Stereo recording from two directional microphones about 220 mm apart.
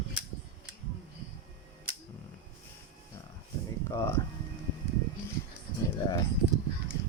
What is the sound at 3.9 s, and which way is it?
Music, 10° left (ahead or behind).